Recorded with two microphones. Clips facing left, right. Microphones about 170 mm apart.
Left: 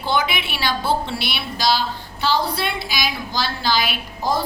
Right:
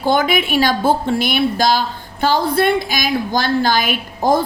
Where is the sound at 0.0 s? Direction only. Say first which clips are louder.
Right 6 dB; 50° right (ahead or behind).